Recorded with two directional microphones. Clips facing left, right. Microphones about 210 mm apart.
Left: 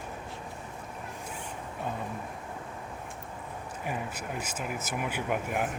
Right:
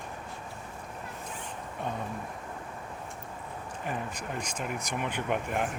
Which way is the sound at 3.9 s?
5° left (ahead or behind).